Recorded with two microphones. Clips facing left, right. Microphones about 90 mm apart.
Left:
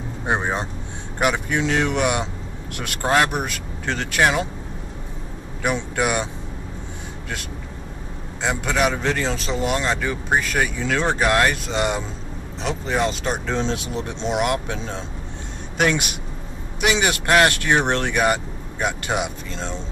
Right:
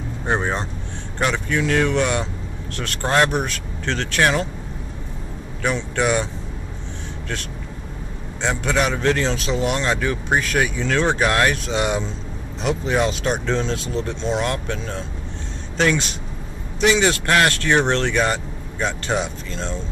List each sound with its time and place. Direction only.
0.3 s speech: 10° left (ahead or behind)
5.6 s speech: 10° left (ahead or behind)
8.4 s speech: 5° left (ahead or behind)
13.6 s speech: 20° left (ahead or behind)
16.8 s speech: 15° left (ahead or behind)